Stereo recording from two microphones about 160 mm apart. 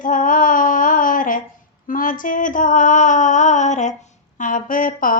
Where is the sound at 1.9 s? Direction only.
60° left (ahead or behind).